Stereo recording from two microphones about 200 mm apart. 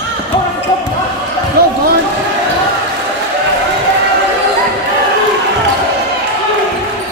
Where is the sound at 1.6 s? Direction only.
50° right (ahead or behind).